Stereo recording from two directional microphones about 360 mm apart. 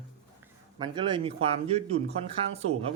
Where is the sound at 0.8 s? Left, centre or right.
Centre.